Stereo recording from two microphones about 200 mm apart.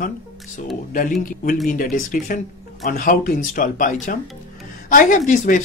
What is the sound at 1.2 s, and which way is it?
Speech, 40° left (ahead or behind).